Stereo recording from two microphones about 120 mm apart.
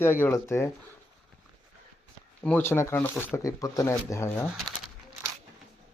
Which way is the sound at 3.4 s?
30° left (ahead or behind).